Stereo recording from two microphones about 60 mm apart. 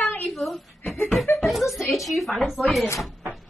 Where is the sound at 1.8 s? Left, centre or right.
Centre.